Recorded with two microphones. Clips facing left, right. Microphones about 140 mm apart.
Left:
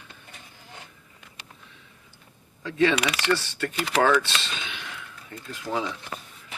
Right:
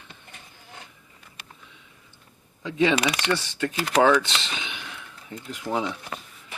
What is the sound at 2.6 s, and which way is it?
Speech, 20° right (ahead or behind).